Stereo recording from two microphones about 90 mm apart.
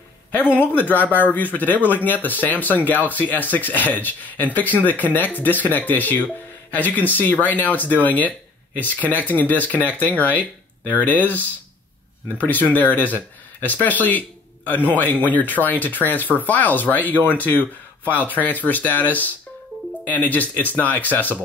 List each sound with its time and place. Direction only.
0.3 s speech: 20° left (ahead or behind)